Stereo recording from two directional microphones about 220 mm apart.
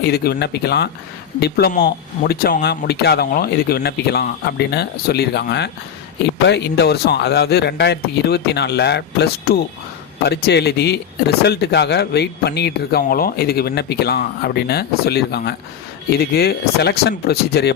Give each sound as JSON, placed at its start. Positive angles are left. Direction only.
{"t": 0.0, "sound": "a man's voice", "side_deg": 45}